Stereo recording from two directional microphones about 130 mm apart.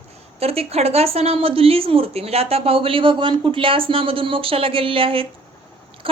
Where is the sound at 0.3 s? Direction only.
50° right (ahead or behind).